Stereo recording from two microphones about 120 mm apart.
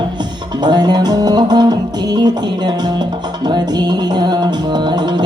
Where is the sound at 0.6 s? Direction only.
35° right (ahead or behind).